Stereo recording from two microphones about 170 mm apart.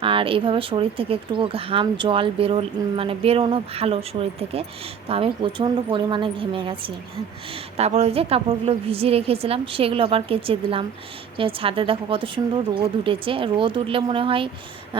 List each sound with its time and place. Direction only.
0.0 s a woman's voice: 30° right (ahead or behind)